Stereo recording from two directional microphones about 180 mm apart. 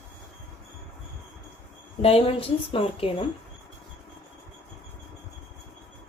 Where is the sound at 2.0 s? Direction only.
30° left (ahead or behind).